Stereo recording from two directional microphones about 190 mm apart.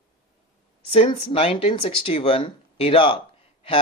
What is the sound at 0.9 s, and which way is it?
Speech, 30° left (ahead or behind).